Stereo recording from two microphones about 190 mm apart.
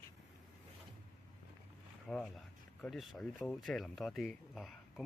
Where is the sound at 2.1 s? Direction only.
Centre (ahead or behind).